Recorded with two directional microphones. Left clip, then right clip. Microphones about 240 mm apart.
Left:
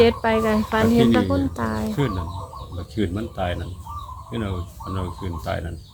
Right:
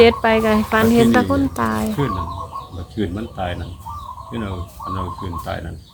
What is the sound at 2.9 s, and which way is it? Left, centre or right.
Speech, left.